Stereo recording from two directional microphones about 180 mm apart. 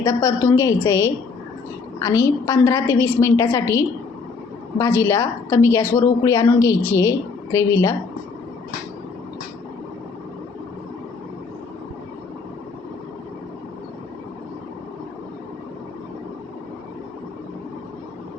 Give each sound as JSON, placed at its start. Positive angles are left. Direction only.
{"t": 0.0, "sound": "a woman's voice", "side_deg": 15}